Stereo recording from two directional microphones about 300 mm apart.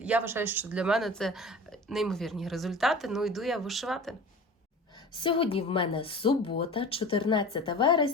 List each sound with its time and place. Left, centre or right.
0.0 s speech: centre
4.9 s speech: centre